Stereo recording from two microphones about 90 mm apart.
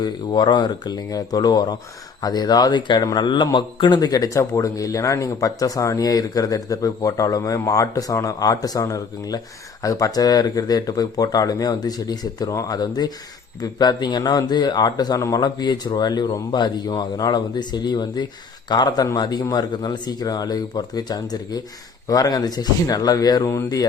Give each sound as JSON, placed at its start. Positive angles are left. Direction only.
{"t": 0.0, "sound": "a man's voice", "side_deg": 55}